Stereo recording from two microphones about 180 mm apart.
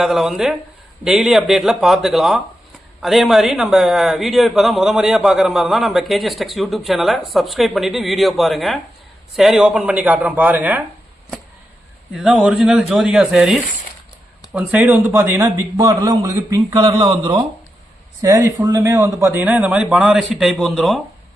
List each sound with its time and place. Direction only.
0.0 s speech: centre (ahead or behind)
12.1 s a man's voice: centre (ahead or behind)